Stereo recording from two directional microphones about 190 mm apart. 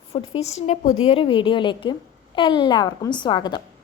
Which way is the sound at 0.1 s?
35° left (ahead or behind).